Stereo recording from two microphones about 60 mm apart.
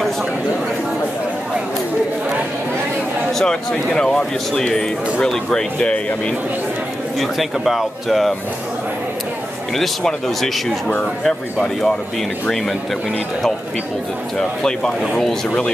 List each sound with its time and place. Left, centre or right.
3.7 s a man's voice: centre
5.8 s speech: left
7.2 s speech: centre
9.8 s a man's voice: centre
14.6 s a man's voice: centre